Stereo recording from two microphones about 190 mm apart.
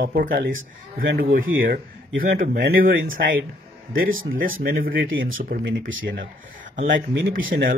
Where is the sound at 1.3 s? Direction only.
90° right.